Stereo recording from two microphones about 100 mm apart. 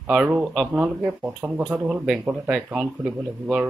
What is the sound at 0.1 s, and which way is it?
Speech, 10° right (ahead or behind).